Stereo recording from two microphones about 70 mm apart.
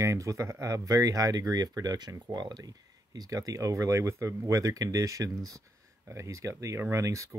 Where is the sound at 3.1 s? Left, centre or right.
Right.